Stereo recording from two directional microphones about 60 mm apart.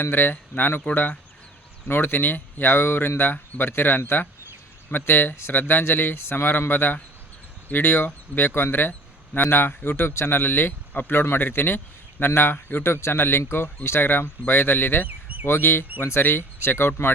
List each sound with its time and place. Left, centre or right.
0.0 s speech: left
15.0 s bird: right
15.4 s speech: left